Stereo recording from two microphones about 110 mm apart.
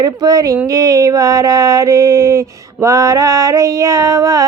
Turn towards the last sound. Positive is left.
turn(degrees=-30)  # may be behind; listen again after turning